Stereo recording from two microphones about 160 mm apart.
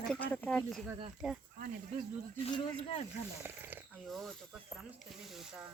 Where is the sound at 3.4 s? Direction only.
10° right (ahead or behind).